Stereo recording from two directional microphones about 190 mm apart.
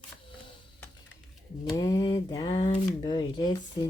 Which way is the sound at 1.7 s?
20° left (ahead or behind).